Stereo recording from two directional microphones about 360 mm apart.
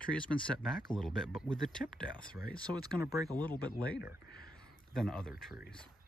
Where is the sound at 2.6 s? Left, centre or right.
Centre.